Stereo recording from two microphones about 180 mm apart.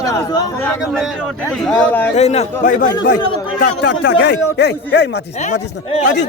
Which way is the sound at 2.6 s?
50° left (ahead or behind).